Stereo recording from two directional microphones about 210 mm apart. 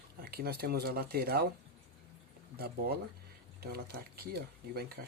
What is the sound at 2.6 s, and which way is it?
Speech, 45° right (ahead or behind).